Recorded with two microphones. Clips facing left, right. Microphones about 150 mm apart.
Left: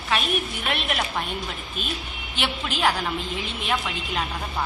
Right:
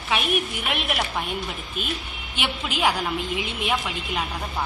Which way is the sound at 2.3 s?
15° right (ahead or behind).